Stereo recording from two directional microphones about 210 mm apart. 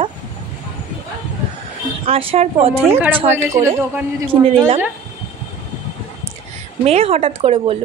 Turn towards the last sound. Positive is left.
turn(degrees=-25)  # may be behind; listen again after turning